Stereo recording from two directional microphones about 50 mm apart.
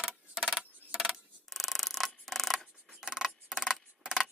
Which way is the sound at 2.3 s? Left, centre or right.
Centre.